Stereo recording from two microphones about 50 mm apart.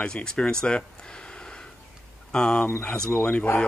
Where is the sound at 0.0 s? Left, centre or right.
Centre.